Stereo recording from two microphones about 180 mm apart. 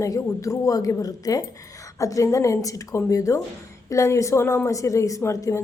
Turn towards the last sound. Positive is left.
turn(degrees=15)  # may be behind; listen again after turning